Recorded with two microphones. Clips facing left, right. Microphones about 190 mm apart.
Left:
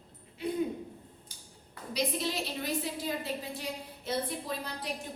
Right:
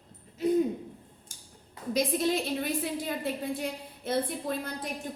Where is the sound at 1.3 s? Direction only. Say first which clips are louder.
Even; 45° right (ahead or behind).